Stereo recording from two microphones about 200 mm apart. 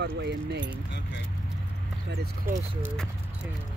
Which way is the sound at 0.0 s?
60° right (ahead or behind).